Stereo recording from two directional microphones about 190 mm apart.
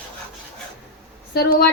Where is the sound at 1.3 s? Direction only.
55° left (ahead or behind).